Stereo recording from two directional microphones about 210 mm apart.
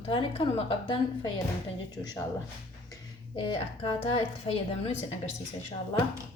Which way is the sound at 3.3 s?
25° left (ahead or behind).